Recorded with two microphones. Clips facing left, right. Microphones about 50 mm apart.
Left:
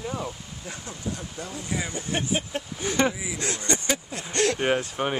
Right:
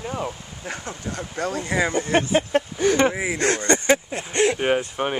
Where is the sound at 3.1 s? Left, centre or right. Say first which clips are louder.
Right 9 dB; right.